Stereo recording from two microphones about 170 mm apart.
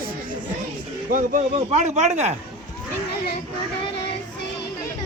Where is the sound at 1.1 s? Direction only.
50° right (ahead or behind).